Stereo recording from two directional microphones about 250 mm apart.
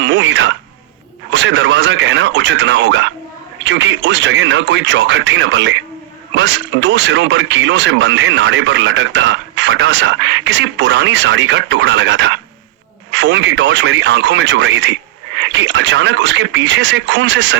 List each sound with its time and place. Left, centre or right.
0.0 s speech: right